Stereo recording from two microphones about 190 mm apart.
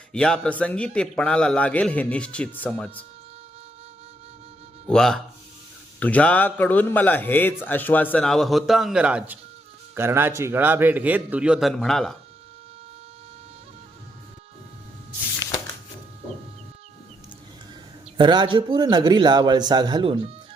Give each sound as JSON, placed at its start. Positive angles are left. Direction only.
{"t": 0.1, "sound": "a man's voice", "side_deg": 5}
{"t": 4.9, "sound": "a man's voice", "side_deg": 0}
{"t": 18.2, "sound": "a man's voice", "side_deg": -25}